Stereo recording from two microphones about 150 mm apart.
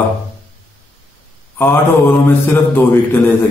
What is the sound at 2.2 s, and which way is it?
Speech, 15° left (ahead or behind).